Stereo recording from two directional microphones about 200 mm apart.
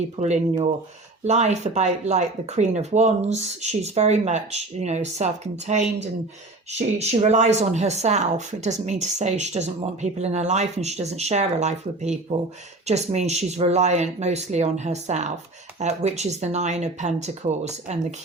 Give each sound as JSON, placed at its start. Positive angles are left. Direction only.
{"t": 0.2, "sound": "speech", "side_deg": -35}